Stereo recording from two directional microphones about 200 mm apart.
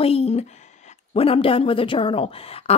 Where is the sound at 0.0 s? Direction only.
30° left (ahead or behind).